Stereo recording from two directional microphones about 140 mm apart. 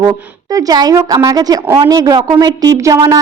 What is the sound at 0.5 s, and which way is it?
A woman's voice, 25° right (ahead or behind).